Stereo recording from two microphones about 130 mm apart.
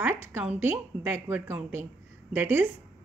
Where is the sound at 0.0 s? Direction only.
15° right (ahead or behind).